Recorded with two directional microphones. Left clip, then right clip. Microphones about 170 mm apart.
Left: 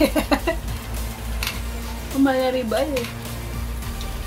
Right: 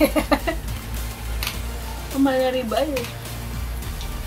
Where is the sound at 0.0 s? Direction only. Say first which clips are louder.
Right 1 dB; 25° left (ahead or behind).